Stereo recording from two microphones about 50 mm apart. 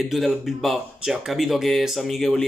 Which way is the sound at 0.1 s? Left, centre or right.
Centre.